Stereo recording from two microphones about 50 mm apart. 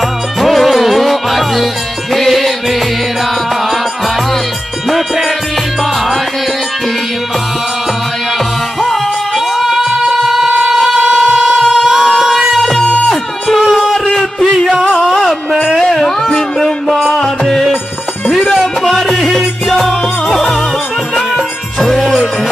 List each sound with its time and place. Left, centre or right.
0.4 s music: centre
4.8 s music: centre
9.6 s music: centre
12.8 s music: left
13.1 s music: centre
13.7 s a sound: centre
13.9 s a sound: centre
15.0 s music: centre
15.8 s music: centre
18.2 s music: centre